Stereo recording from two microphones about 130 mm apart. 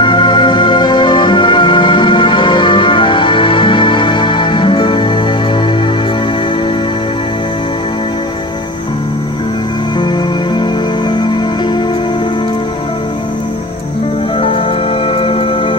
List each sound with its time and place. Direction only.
0.0 s music: 35° left (ahead or behind)
15.1 s music: 45° left (ahead or behind)